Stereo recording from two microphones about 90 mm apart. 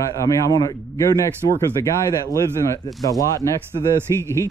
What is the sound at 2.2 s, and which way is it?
A man's voice, 45° left (ahead or behind).